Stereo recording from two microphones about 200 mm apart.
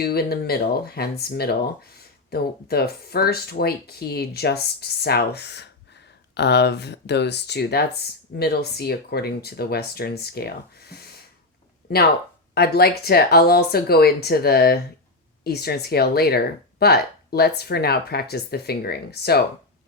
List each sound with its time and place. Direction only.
0.0 s speech: 50° left (ahead or behind)